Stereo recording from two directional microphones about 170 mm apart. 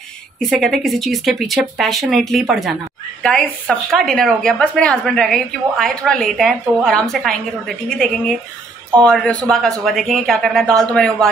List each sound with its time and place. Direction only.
0.4 s a woman's voice: centre (ahead or behind)